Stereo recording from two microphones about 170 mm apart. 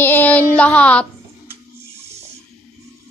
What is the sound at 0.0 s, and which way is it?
Child singing, 10° left (ahead or behind).